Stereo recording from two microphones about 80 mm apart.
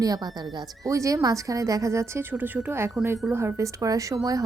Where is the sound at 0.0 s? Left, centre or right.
Right.